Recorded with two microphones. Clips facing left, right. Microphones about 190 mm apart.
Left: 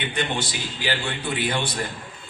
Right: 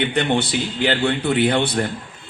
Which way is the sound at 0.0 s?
60° right (ahead or behind).